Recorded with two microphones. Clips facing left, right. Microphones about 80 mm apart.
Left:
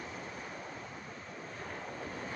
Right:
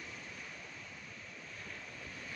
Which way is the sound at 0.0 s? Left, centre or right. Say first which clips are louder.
Left 6 dB; left.